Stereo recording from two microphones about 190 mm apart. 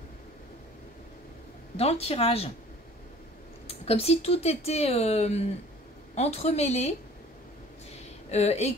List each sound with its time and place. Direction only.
1.8 s speech: 35° left (ahead or behind)
3.6 s speech: 30° left (ahead or behind)
8.3 s speech: 35° left (ahead or behind)